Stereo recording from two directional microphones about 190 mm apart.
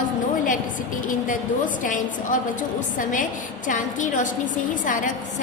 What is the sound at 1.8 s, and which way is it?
A woman's voice, 45° left (ahead or behind).